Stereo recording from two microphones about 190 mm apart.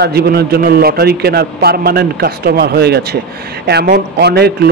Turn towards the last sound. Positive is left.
turn(degrees=-60)  # may be behind; listen again after turning